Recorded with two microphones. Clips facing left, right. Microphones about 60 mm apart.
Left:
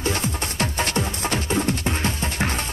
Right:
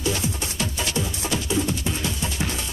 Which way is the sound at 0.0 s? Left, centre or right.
Left.